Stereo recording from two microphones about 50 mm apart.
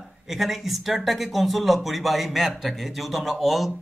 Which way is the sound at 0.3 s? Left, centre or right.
Centre.